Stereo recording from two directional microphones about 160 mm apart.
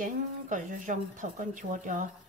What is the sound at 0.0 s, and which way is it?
A woman's voice, 55° right (ahead or behind).